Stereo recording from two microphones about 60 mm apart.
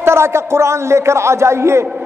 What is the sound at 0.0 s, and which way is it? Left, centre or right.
A man's voice, right.